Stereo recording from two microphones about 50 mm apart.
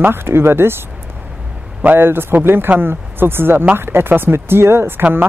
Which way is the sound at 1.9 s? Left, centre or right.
Right.